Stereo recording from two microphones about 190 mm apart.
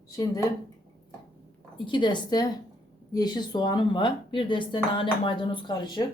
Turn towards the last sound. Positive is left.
turn(degrees=25)  # may be behind; listen again after turning